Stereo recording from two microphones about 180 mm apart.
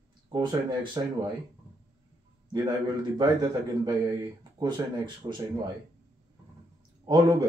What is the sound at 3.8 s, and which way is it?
Speech, 20° right (ahead or behind).